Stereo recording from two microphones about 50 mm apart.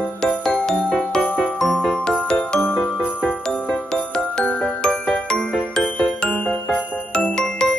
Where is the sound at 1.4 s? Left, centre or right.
Centre.